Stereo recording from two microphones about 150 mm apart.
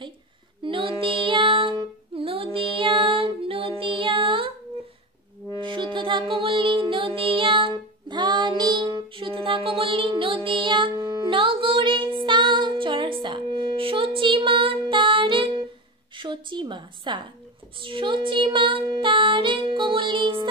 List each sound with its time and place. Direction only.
0.6 s child singing: 35° right (ahead or behind)
5.6 s music: 35° right (ahead or behind)
16.2 s a sound: 30° right (ahead or behind)
17.7 s music: 35° right (ahead or behind)